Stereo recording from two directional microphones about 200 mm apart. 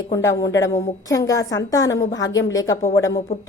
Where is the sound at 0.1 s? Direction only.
15° left (ahead or behind).